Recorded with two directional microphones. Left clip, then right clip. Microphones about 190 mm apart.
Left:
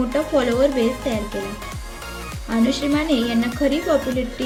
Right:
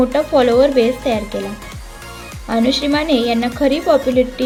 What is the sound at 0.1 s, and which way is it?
A woman's voice, 45° right (ahead or behind).